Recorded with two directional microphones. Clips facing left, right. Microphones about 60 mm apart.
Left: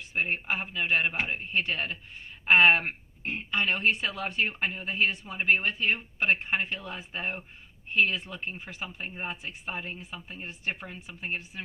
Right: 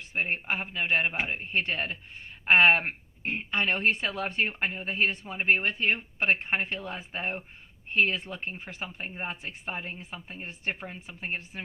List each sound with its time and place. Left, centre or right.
0.3 s a man's voice: right
1.1 s a man's voice: centre
1.5 s speech: right
2.8 s speech: right
3.5 s a woman's voice: right
4.4 s speech: right
5.4 s speech: right